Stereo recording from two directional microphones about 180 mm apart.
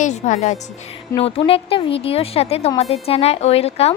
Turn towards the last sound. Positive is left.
turn(degrees=35)  # may be behind; listen again after turning